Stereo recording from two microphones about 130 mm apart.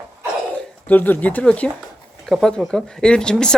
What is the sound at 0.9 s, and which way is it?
Speech, 15° left (ahead or behind).